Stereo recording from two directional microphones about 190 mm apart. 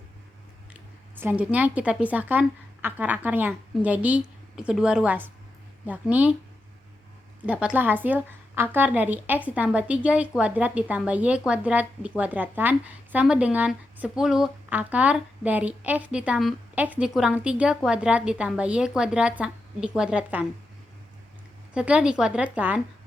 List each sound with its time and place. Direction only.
1.2 s a woman's voice: 5° right (ahead or behind)
7.4 s a woman's voice: 5° right (ahead or behind)
21.7 s a woman's voice: 5° right (ahead or behind)